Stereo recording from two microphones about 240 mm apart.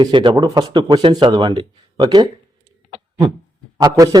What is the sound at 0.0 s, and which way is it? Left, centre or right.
Speech, centre.